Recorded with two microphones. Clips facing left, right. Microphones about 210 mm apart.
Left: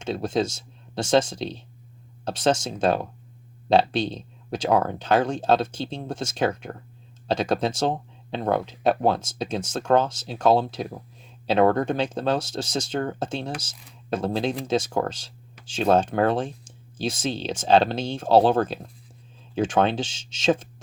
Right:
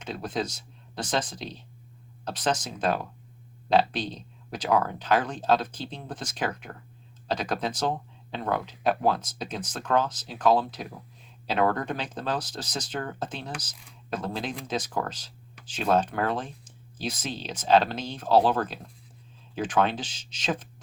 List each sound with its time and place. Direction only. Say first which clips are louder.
0.0 s speech: left 6 dB; 25° left (ahead or behind)